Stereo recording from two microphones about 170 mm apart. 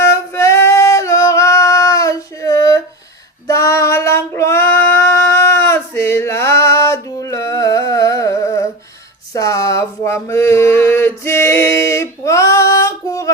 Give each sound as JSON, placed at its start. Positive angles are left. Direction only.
{"t": 0.0, "sound": "singing", "side_deg": 15}
{"t": 3.4, "sound": "female singing", "side_deg": 20}
{"t": 9.3, "sound": "a sound", "side_deg": 20}